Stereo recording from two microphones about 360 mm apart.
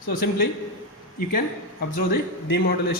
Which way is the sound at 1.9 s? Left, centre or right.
Left.